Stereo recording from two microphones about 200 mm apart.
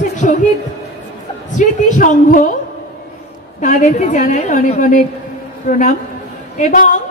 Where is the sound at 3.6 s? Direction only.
40° left (ahead or behind).